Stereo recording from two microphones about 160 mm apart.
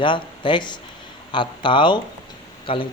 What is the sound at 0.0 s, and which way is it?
Speech, 30° left (ahead or behind).